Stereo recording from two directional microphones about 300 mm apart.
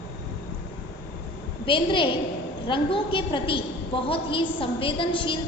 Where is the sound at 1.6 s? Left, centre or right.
Centre.